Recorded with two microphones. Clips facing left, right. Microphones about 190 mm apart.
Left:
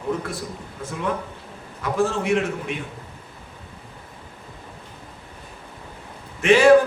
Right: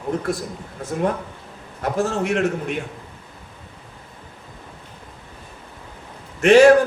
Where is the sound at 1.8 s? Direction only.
45° right (ahead or behind).